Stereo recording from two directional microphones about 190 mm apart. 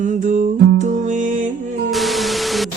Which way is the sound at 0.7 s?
40° right (ahead or behind).